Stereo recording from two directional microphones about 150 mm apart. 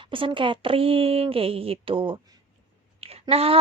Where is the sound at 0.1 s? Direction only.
35° right (ahead or behind).